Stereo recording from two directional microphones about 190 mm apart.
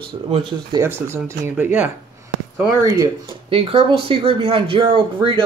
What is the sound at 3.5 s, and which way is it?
Speech, 30° right (ahead or behind).